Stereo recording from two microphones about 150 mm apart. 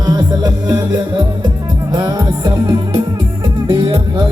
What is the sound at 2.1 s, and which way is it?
Music, 25° right (ahead or behind).